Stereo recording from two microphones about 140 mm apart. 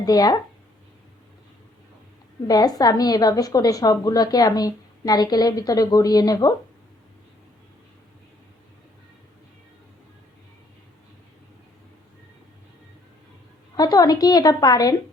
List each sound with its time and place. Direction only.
0.0 s a woman's voice: 25° left (ahead or behind)
2.5 s a woman's voice: 25° left (ahead or behind)
13.7 s a woman's voice: 25° left (ahead or behind)